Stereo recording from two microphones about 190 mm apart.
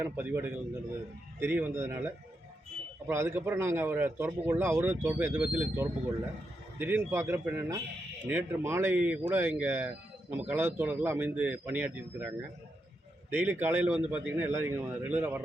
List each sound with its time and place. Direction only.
0.0 s a man's voice: 10° right (ahead or behind)
13.3 s a man's voice: 10° right (ahead or behind)